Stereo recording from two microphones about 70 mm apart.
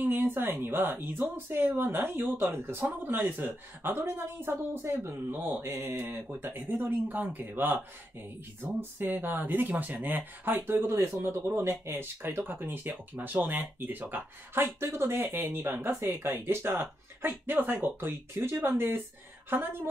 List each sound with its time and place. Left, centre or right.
0.0 s speech: right